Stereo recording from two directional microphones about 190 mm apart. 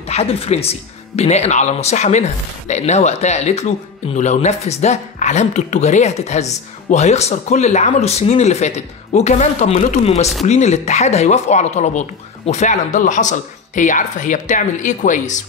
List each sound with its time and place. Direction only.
0.0 s speech: 30° left (ahead or behind)